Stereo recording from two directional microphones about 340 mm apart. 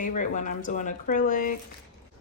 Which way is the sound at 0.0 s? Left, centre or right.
Left.